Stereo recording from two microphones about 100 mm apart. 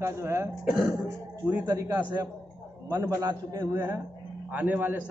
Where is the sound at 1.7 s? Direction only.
30° right (ahead or behind).